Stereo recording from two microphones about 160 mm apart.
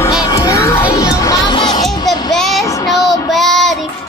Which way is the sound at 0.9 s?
20° left (ahead or behind).